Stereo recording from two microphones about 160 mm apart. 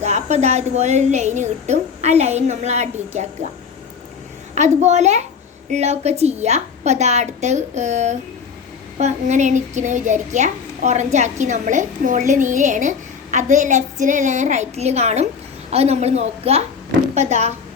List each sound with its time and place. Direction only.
0.0 s a woman's voice: 45° right (ahead or behind)
4.5 s a woman's voice: 45° right (ahead or behind)